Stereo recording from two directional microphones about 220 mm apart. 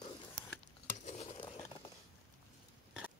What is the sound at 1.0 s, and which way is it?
Patter, 30° left (ahead or behind).